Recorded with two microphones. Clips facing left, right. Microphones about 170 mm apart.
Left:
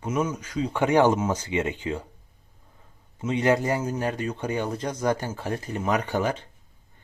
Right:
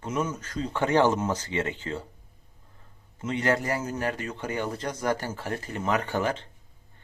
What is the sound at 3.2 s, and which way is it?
Speech, 15° left (ahead or behind).